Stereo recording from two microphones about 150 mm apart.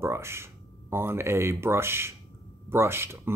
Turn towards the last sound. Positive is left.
turn(degrees=-15)  # may be behind; listen again after turning